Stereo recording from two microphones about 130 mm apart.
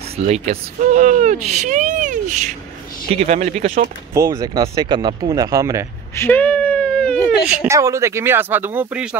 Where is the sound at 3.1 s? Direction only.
50° right (ahead or behind); by 3.8 s 75° right (ahead or behind).